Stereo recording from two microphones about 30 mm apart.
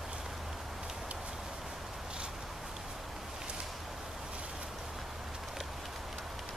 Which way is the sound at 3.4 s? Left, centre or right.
Right.